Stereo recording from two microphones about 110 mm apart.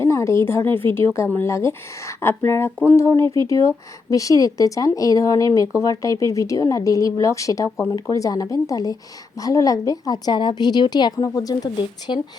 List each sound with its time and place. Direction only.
0.0 s a woman's voice: 25° left (ahead or behind)